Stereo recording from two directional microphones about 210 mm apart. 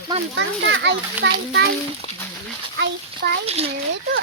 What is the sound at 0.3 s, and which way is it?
A child's voice, 60° right (ahead or behind).